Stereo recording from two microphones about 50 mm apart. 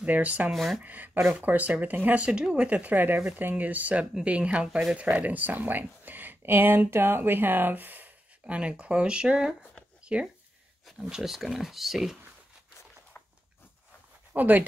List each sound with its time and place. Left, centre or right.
0.0 s speech: right
0.5 s speech: centre
0.8 s speech: right
2.1 s speech: right
2.7 s speech: right
5.1 s speech: right
8.5 s speech: right
11.1 s speech: centre
14.3 s speech: right